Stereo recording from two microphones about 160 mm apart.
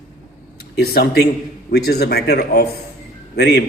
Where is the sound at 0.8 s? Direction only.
85° left.